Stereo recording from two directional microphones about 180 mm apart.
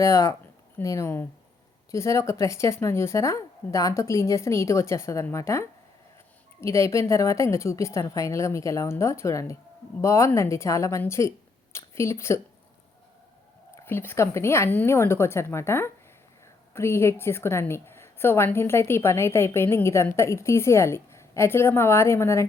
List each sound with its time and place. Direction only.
0.0 s a woman's voice: 15° left (ahead or behind)
13.8 s a woman's voice: 10° left (ahead or behind)